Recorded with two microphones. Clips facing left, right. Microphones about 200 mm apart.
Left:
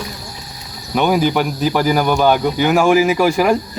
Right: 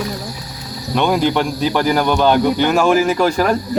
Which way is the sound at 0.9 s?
5° left (ahead or behind).